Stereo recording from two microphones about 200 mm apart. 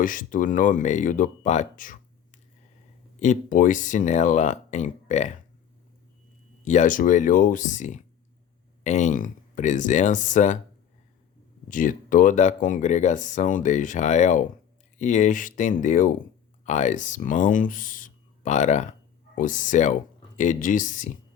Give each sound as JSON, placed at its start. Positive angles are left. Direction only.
{"t": 0.0, "sound": "speech", "side_deg": 40}
{"t": 3.2, "sound": "speech", "side_deg": 40}
{"t": 6.7, "sound": "speech", "side_deg": 40}
{"t": 11.7, "sound": "speech", "side_deg": 40}